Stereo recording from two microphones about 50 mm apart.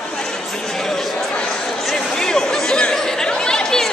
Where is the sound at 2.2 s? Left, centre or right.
Centre.